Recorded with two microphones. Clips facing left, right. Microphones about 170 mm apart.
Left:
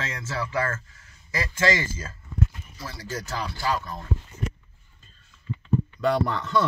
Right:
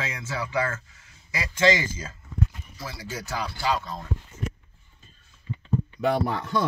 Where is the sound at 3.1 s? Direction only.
10° right (ahead or behind).